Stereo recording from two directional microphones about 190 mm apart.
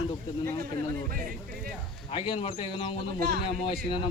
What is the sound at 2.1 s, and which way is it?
Speech, 25° left (ahead or behind).